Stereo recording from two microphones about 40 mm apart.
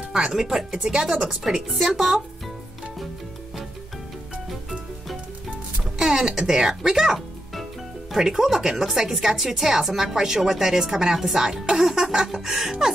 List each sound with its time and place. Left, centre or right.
0.1 s speech: centre
5.9 s speech: centre